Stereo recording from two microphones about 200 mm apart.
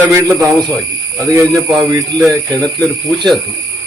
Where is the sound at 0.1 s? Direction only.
15° right (ahead or behind).